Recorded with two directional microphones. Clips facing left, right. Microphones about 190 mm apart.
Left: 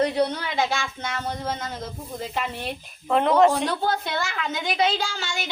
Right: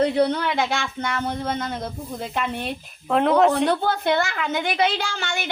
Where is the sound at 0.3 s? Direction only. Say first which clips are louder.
Right 2 dB; 60° right (ahead or behind).